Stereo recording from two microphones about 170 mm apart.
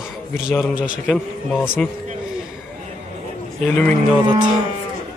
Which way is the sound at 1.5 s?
10° left (ahead or behind).